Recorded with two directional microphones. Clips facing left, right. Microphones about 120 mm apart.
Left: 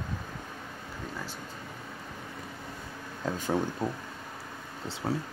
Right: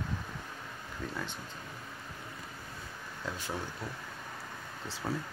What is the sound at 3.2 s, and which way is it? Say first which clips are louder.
Speech: left 9 dB; 45° left (ahead or behind).